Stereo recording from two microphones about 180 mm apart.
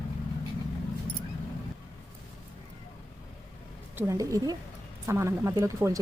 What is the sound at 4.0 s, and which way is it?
Speech, 15° right (ahead or behind).